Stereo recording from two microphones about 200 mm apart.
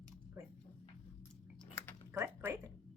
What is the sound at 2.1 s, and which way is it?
Typing, 15° right (ahead or behind).